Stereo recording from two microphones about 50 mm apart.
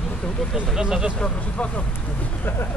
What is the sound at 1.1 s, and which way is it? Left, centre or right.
Speech, left.